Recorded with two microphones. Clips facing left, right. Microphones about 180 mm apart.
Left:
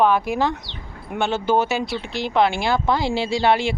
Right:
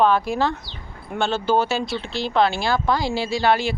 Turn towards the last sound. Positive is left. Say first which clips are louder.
# left 1 dB
turn(degrees=25)  # may be behind; listen again after turning